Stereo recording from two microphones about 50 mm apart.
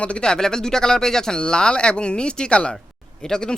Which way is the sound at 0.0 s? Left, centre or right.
Centre.